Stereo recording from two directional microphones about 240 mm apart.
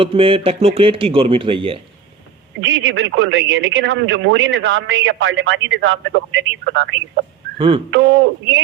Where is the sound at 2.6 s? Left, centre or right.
Right.